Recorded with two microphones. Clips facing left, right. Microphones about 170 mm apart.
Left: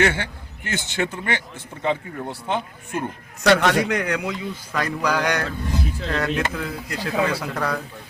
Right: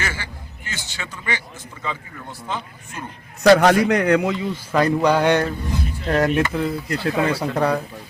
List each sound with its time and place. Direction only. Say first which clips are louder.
0.0 s a man's voice: left 9 dB; 60° left (ahead or behind)
3.4 s speech: right 5 dB; 35° right (ahead or behind)
5.0 s a sound: right 3 dB; 30° right (ahead or behind)
6.1 s speech: right 7 dB; 35° right (ahead or behind)